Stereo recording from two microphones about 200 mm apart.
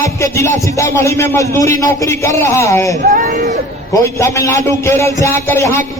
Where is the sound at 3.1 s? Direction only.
50° right (ahead or behind).